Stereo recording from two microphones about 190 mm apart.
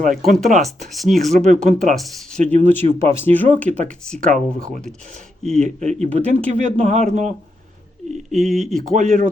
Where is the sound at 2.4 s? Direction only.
35° right (ahead or behind).